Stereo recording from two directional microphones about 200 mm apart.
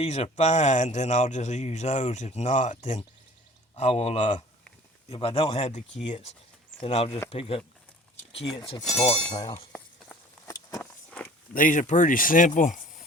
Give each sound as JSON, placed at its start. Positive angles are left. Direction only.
{"t": 0.0, "sound": "a man's voice", "side_deg": 30}
{"t": 8.8, "sound": "speech", "side_deg": 0}
{"t": 9.4, "sound": "speech", "side_deg": 15}
{"t": 9.7, "sound": "walk", "side_deg": 5}
{"t": 10.8, "sound": "a sound", "side_deg": 5}
{"t": 11.5, "sound": "a man's voice", "side_deg": 40}